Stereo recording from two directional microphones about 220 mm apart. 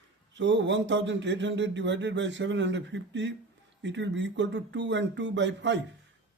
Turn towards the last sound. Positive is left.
turn(degrees=-55)  # may be behind; listen again after turning